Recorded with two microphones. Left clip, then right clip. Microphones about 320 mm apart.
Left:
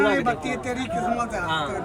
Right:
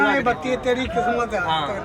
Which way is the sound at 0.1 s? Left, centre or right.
Right.